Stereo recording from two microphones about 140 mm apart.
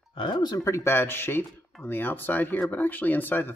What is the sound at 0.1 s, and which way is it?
Speech, 30° left (ahead or behind).